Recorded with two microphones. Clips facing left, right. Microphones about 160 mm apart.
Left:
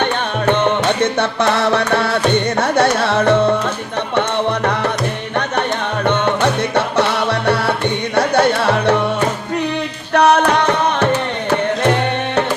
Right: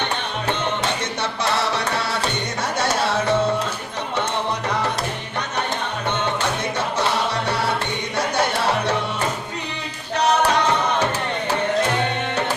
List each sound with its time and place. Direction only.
0.0 s music: 55° left (ahead or behind)
2.6 s carnatic music: 60° left (ahead or behind)
4.1 s tabla: 65° left (ahead or behind)
6.1 s music: 65° left (ahead or behind)
10.2 s music: 60° left (ahead or behind)